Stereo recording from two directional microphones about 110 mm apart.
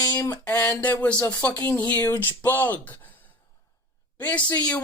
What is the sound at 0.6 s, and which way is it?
Speech, 15° left (ahead or behind).